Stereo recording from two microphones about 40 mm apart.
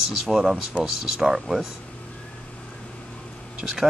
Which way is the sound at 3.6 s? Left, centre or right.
Centre.